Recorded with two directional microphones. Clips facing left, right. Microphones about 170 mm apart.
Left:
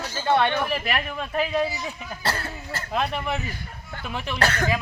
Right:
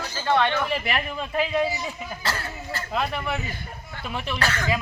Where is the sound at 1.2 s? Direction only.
15° right (ahead or behind).